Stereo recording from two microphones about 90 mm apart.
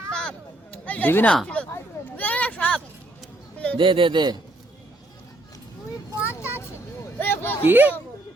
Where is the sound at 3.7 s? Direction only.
70° right (ahead or behind).